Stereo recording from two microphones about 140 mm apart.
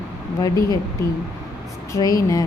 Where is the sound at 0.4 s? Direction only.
25° left (ahead or behind).